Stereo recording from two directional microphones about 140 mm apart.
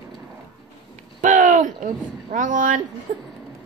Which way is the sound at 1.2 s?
65° right (ahead or behind).